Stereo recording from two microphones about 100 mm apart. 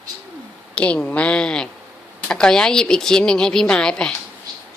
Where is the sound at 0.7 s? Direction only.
10° left (ahead or behind).